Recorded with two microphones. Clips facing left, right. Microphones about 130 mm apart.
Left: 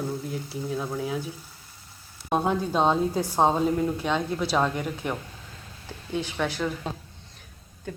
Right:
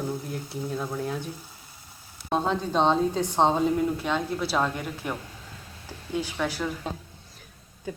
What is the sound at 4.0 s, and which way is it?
Stir, centre (ahead or behind).